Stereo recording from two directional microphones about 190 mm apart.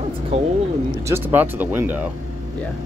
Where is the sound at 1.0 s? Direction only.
10° right (ahead or behind).